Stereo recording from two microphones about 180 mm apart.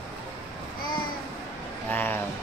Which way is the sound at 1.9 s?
10° left (ahead or behind).